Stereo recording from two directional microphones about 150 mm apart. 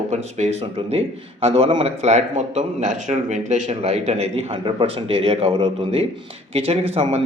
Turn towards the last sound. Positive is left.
turn(degrees=-45)  # may be behind; listen again after turning